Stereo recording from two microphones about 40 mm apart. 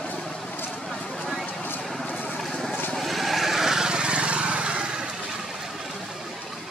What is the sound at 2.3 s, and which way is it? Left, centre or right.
Vehicle, centre.